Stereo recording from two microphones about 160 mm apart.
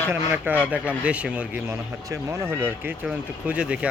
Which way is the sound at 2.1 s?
20° right (ahead or behind).